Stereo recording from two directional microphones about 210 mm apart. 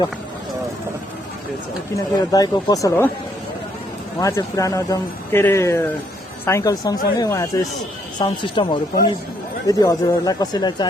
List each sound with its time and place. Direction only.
2.3 s speech: 15° left (ahead or behind)
4.2 s speech: 15° left (ahead or behind)